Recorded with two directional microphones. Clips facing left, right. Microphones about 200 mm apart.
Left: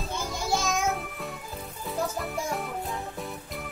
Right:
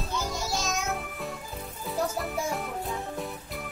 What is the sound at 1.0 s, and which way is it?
Music, centre (ahead or behind).